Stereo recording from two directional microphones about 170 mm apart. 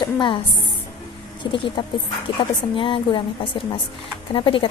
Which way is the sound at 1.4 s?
30° left (ahead or behind).